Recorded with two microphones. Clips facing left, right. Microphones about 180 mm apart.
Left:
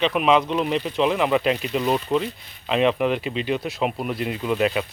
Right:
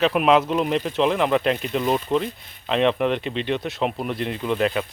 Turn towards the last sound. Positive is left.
turn(degrees=5)  # may be behind; listen again after turning